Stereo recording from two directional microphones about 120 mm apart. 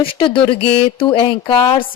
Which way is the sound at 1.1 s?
40° left (ahead or behind).